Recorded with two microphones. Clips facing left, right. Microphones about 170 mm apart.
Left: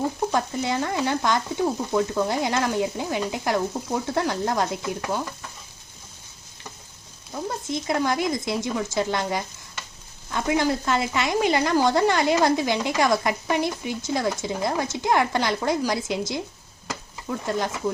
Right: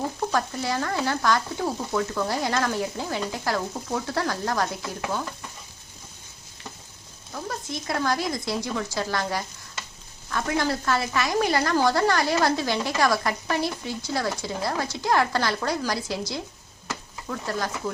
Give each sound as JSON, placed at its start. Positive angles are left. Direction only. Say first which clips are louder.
{"t": 0.3, "sound": "stir", "louder": "left 2 dB", "side_deg": 20}
{"t": 7.3, "sound": "stir", "louder": "left 4 dB", "side_deg": 20}
{"t": 16.9, "sound": "speech", "louder": "left 2 dB", "side_deg": 20}